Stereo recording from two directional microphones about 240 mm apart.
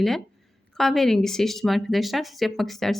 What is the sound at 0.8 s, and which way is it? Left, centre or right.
Speech, centre.